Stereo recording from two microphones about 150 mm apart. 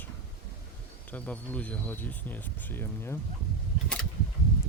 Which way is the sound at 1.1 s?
10° left (ahead or behind).